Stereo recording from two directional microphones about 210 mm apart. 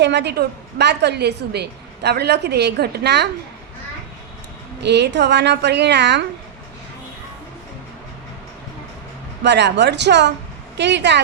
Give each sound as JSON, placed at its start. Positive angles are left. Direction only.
{"t": 0.0, "sound": "a woman's voice", "side_deg": -55}
{"t": 4.8, "sound": "a woman's voice", "side_deg": -55}
{"t": 9.4, "sound": "speech", "side_deg": -55}